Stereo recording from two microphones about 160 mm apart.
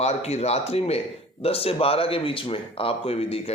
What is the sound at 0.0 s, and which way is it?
Speech, 45° left (ahead or behind).